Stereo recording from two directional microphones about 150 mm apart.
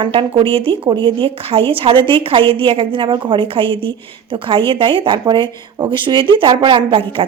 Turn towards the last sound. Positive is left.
turn(degrees=-35)  # may be behind; listen again after turning